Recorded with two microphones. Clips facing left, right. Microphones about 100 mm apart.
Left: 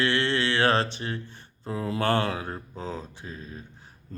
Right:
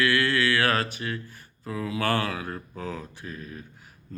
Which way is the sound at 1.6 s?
30° left (ahead or behind).